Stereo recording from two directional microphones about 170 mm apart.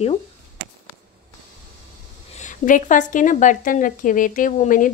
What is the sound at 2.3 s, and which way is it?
A woman's voice, 50° left (ahead or behind).